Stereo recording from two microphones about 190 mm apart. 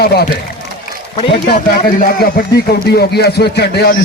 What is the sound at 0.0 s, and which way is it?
Speech, 55° left (ahead or behind).